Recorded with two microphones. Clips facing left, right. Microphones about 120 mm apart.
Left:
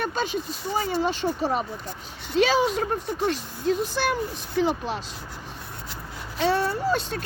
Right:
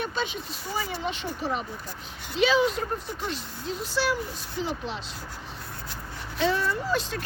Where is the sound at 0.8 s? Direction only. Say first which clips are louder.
Left 7 dB; 35° left (ahead or behind).